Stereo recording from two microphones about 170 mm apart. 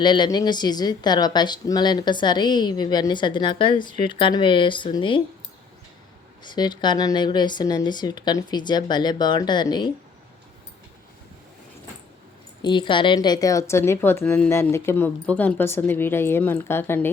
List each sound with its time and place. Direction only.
0.0 s speech: 25° left (ahead or behind)
6.4 s speech: 25° left (ahead or behind)
12.6 s a woman's voice: 30° left (ahead or behind); by 17.1 s 15° left (ahead or behind)